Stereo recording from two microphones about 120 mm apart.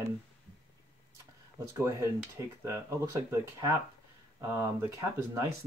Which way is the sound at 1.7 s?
25° right (ahead or behind).